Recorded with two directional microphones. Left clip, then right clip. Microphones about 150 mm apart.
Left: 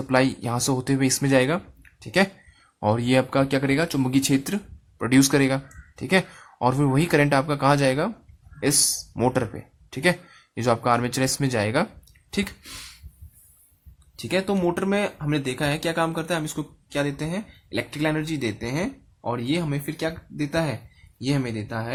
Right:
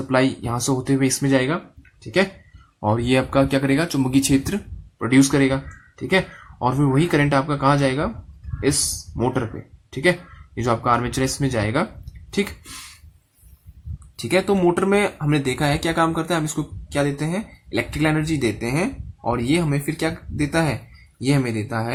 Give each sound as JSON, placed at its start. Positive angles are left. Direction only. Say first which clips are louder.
{"t": 0.1, "sound": "speech", "louder": "right 2 dB", "side_deg": 40}
{"t": 2.8, "sound": "speech", "louder": "right 1 dB", "side_deg": 35}
{"t": 9.1, "sound": "speech", "louder": "right 1 dB", "side_deg": 50}
{"t": 14.2, "sound": "speech", "louder": "right 5 dB", "side_deg": 15}